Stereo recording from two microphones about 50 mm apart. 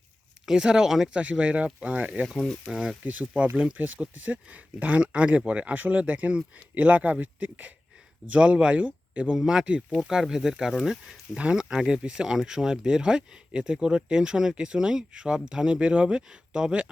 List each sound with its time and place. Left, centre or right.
0.4 s speech: centre
1.1 s speech: right
2.4 s speech: centre
3.0 s speech: right
9.4 s speech: centre
11.3 s speech: right